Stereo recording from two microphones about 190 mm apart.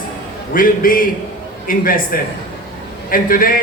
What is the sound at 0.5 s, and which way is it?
A man's voice, 45° left (ahead or behind).